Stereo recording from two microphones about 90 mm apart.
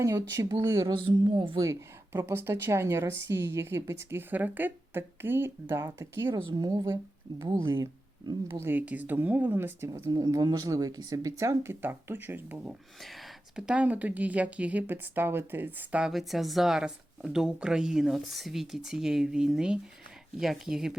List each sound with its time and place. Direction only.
0.0 s speech: 35° right (ahead or behind)
0.9 s a woman's voice: 70° right (ahead or behind)
1.5 s speech: 35° right (ahead or behind)
6.3 s speech: 45° right (ahead or behind); by 10.0 s 30° right (ahead or behind)
10.1 s speech: 40° right (ahead or behind); by 12.6 s 20° right (ahead or behind)
13.0 s a sound: centre (ahead or behind)
13.7 s speech: 15° right (ahead or behind)